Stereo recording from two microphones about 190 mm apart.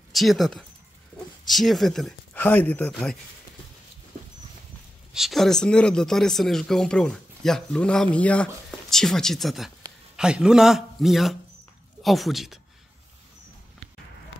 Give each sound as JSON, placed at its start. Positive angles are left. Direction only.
{"t": 0.1, "sound": "speech", "side_deg": 0}
{"t": 5.1, "sound": "speech", "side_deg": 0}